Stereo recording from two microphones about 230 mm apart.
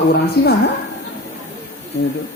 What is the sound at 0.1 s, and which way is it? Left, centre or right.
Speech, left.